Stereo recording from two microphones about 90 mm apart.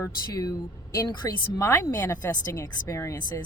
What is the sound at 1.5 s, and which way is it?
A woman's voice, 35° left (ahead or behind).